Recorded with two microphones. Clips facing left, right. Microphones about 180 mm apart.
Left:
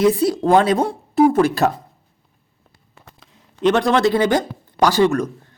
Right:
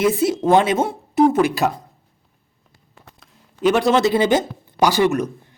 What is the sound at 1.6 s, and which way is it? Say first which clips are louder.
Speech: left 2 dB; centre (ahead or behind).